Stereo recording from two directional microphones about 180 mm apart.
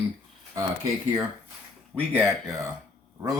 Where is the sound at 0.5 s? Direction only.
15° right (ahead or behind).